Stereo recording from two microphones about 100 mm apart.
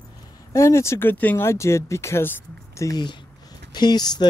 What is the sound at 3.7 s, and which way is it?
Speech, 45° left (ahead or behind).